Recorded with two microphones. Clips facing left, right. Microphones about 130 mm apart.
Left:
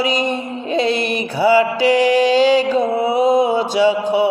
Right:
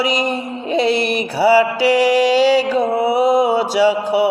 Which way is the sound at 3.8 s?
30° right (ahead or behind).